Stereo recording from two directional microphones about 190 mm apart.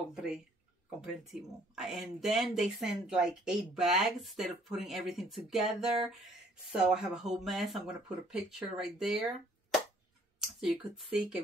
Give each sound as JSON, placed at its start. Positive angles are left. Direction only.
{"t": 0.1, "sound": "speech", "side_deg": -5}